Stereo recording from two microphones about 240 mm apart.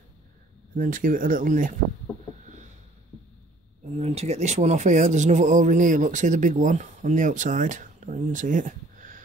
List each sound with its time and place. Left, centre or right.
0.7 s speech: right
3.8 s speech: right